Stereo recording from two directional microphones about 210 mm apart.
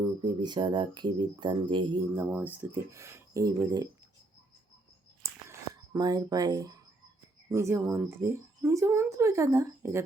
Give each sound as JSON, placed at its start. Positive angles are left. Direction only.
{"t": 0.0, "sound": "speech", "side_deg": -20}
{"t": 5.2, "sound": "a sound", "side_deg": -15}
{"t": 7.5, "sound": "speech", "side_deg": -10}